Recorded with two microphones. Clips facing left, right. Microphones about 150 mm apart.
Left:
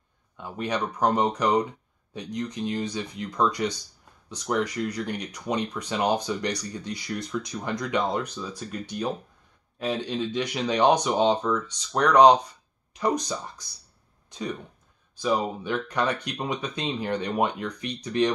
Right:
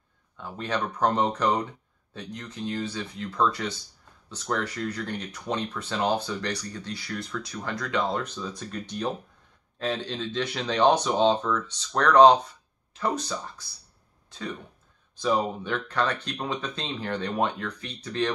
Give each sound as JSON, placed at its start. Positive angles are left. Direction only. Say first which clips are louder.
{"t": 0.4, "sound": "speech", "louder": "left 1 dB", "side_deg": 15}